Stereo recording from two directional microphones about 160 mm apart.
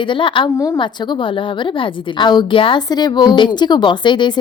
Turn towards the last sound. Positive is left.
turn(degrees=30)  # may be behind; listen again after turning